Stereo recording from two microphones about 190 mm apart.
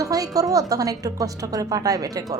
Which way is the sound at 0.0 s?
20° right (ahead or behind).